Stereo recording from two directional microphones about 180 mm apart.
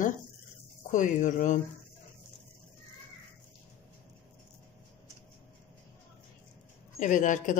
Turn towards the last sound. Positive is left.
turn(degrees=45)  # may be behind; listen again after turning